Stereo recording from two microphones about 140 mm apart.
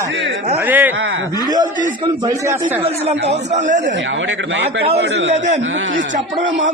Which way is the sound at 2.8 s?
50° right (ahead or behind).